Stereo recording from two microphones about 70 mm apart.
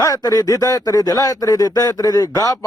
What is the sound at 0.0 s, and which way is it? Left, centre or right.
Speech, left.